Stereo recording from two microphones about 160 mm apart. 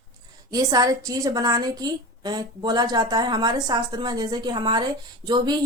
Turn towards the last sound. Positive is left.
turn(degrees=-25)  # may be behind; listen again after turning